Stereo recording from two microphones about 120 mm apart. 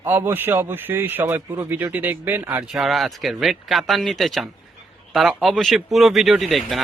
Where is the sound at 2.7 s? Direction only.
Centre (ahead or behind).